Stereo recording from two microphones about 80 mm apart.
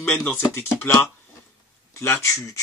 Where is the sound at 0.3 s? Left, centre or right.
Left.